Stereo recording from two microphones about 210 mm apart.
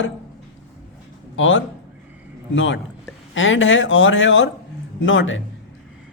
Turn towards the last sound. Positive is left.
turn(degrees=65)  # may be behind; listen again after turning